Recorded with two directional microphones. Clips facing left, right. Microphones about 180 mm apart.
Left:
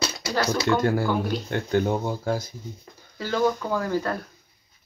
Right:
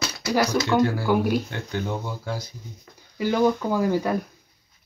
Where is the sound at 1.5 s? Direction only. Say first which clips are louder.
Left 6 dB; 55° left (ahead or behind).